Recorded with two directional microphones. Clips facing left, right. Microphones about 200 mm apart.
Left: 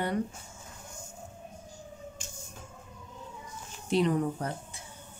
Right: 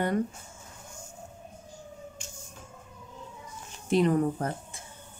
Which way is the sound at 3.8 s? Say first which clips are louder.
Right 3 dB; 50° right (ahead or behind).